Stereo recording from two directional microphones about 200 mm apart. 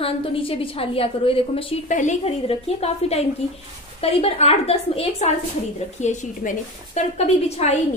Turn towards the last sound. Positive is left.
turn(degrees=35)  # may be behind; listen again after turning